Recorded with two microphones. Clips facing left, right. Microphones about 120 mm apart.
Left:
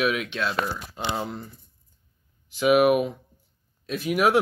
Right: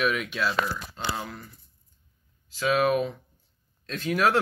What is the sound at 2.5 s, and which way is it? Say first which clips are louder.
Speech: left 5 dB; 15° left (ahead or behind).